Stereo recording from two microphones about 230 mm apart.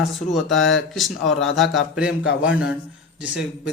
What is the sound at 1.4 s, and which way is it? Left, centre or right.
Speech, centre.